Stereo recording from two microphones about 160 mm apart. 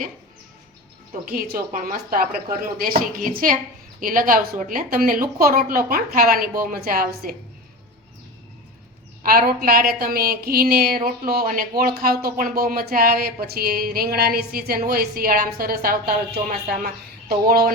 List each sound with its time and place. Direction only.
1.4 s a woman's voice: 65° right (ahead or behind)
9.2 s a woman's voice: 65° right (ahead or behind)